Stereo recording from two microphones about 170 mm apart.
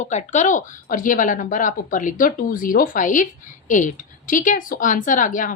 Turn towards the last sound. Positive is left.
turn(degrees=50)  # may be behind; listen again after turning